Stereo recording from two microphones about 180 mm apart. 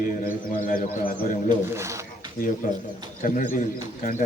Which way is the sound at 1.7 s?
15° right (ahead or behind).